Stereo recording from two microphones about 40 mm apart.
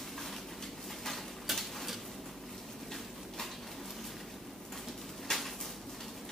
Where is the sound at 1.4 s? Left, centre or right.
Centre.